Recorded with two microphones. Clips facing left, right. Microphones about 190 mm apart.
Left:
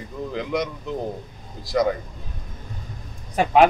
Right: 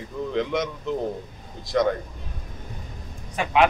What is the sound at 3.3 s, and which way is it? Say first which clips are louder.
Speech: left 4 dB; 40° left (ahead or behind).